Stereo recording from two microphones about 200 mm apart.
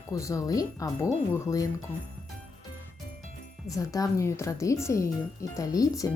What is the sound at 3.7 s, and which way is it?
A woman's voice, 15° left (ahead or behind).